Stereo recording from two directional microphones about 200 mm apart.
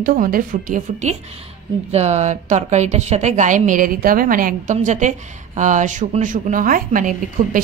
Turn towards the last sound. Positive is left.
turn(degrees=-45)  # may be behind; listen again after turning